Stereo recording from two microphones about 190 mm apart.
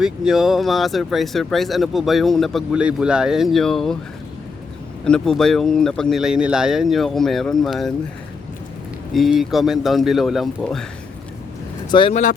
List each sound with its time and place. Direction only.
0.0 s speech: centre (ahead or behind)
5.0 s speech: 5° left (ahead or behind)
9.1 s speech: centre (ahead or behind)
11.9 s speech: 25° left (ahead or behind)